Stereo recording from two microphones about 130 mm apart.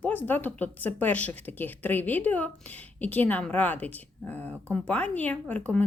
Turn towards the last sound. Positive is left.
turn(degrees=10)  # may be behind; listen again after turning